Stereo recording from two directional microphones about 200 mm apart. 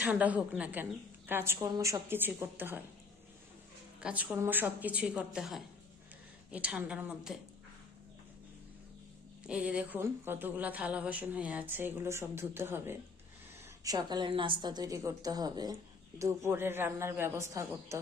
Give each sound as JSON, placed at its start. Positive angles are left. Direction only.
{"t": 0.0, "sound": "a woman's voice", "side_deg": -5}
{"t": 4.0, "sound": "a woman's voice", "side_deg": -5}
{"t": 9.4, "sound": "a woman's voice", "side_deg": -5}